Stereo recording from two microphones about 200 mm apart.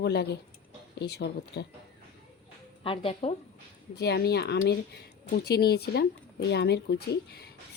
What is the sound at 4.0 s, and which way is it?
A woman's voice, 55° left (ahead or behind).